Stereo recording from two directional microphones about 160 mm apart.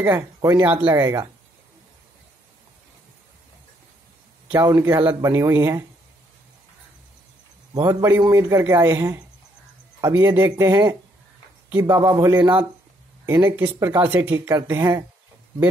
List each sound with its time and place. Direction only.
0.0 s speech: 15° right (ahead or behind)
4.5 s speech: 15° right (ahead or behind)
7.7 s a man's voice: 25° right (ahead or behind)